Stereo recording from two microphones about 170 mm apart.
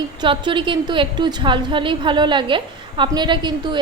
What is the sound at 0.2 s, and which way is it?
A woman's voice, 30° right (ahead or behind).